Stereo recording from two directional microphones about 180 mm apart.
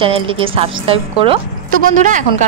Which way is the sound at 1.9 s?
45° right (ahead or behind).